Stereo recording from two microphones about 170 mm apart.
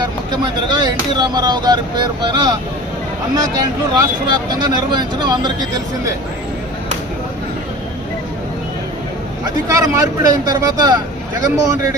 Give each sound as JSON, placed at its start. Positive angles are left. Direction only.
{"t": 0.8, "sound": "speech", "side_deg": -25}
{"t": 3.9, "sound": "speech", "side_deg": -25}
{"t": 9.6, "sound": "speech", "side_deg": -20}